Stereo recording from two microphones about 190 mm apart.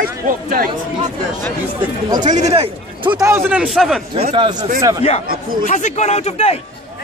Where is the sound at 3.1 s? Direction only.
10° right (ahead or behind).